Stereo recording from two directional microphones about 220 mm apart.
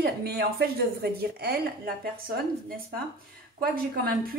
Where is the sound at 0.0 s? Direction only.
45° right (ahead or behind).